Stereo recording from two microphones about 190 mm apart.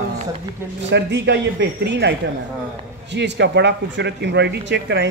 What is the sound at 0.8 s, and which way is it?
Speech, 65° right (ahead or behind).